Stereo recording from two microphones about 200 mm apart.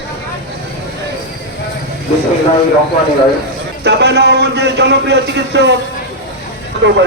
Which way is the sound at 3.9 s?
60° right (ahead or behind).